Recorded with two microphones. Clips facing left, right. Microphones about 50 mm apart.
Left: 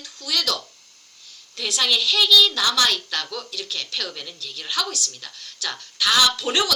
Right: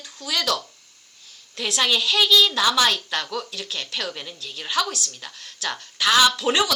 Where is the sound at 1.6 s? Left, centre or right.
Right.